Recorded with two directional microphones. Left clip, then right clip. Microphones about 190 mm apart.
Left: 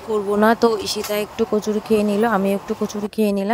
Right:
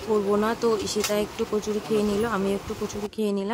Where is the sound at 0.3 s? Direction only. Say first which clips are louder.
Left 11 dB; 40° left (ahead or behind).